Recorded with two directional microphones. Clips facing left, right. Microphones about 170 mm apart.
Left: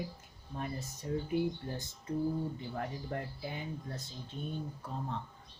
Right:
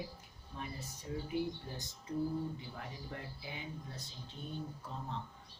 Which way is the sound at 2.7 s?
50° left (ahead or behind).